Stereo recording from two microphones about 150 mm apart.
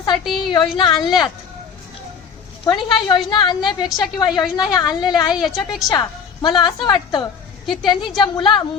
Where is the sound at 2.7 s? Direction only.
30° left (ahead or behind).